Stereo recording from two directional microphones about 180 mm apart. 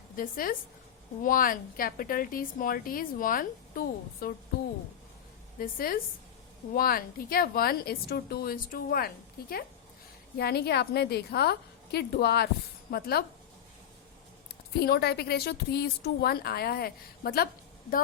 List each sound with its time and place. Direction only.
0.2 s a woman's voice: 55° left (ahead or behind)
5.5 s speech: 55° left (ahead or behind)
14.8 s speech: 60° left (ahead or behind)